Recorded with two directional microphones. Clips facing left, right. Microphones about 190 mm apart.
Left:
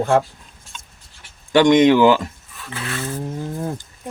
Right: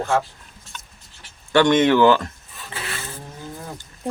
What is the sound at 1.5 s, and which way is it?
Speech, 15° left (ahead or behind).